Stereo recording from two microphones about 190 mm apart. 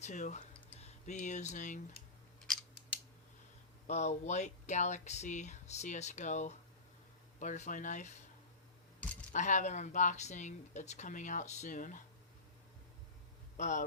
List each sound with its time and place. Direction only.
0.0 s speech: 40° left (ahead or behind)
3.8 s speech: 35° left (ahead or behind)
9.3 s speech: 40° left (ahead or behind)
13.6 s speech: 40° left (ahead or behind)